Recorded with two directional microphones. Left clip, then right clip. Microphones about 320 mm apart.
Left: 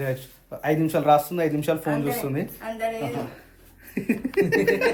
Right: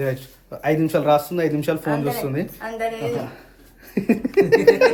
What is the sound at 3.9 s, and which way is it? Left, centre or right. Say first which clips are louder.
A woman's voice: right 6 dB; centre.